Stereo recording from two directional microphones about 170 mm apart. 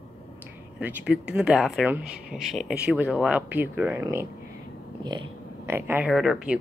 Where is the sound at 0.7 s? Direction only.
10° right (ahead or behind).